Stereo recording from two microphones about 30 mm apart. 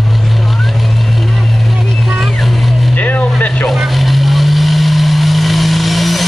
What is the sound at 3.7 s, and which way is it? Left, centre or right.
Vehicle, centre.